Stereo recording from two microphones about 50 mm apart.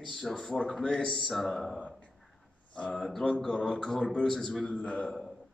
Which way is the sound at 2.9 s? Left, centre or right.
Centre.